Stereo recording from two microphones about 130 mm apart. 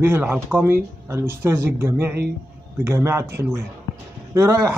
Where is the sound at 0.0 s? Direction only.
15° right (ahead or behind).